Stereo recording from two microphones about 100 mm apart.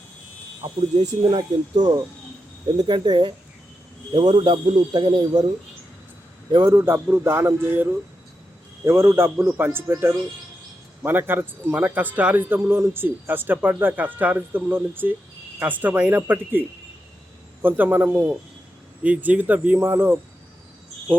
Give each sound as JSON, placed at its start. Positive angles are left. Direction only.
{"t": 0.6, "sound": "speech", "side_deg": -55}
{"t": 6.7, "sound": "a man's voice", "side_deg": -25}